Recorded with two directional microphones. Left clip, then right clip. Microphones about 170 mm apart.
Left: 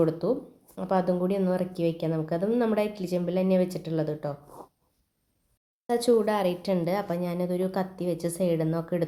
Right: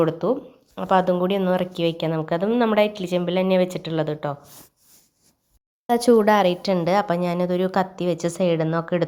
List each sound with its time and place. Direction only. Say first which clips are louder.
0.0 s a woman's voice: right 4 dB; 15° right (ahead or behind)
1.2 s a woman's voice: right 6 dB; 5° right (ahead or behind)
5.9 s speech: right 7 dB; 35° right (ahead or behind)
6.4 s a woman's voice: right 7 dB; 15° right (ahead or behind)